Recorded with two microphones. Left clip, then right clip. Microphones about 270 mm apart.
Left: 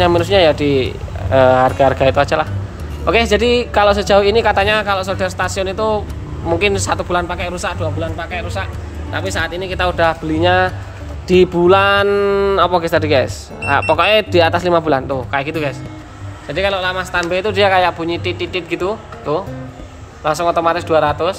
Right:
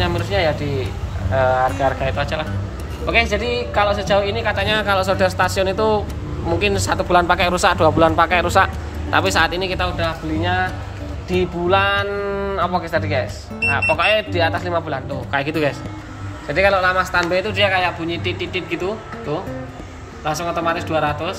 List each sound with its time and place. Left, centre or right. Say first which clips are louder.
0.0 s speech: left 8 dB; left
15.0 s speech: left 3 dB; centre
17.4 s speech: left 5 dB; centre
20.2 s speech: left 6 dB; centre